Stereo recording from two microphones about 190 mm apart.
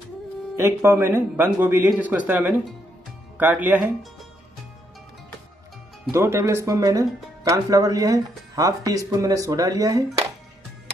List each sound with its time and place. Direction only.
0.6 s speech: 15° right (ahead or behind)
6.1 s speech: 15° right (ahead or behind)